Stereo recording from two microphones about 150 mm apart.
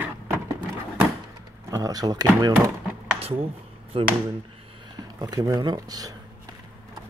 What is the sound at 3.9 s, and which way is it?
Speech, 35° right (ahead or behind).